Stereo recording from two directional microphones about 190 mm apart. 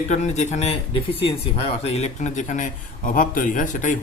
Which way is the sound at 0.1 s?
35° left (ahead or behind).